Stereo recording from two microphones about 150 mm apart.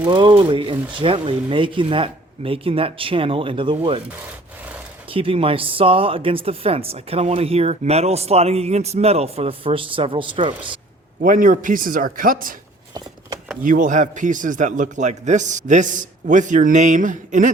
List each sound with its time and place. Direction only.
0.0 s speech: 30° right (ahead or behind)
5.0 s speech: 35° right (ahead or behind)
11.2 s speech: 65° right (ahead or behind)
13.6 s a man's voice: 60° right (ahead or behind)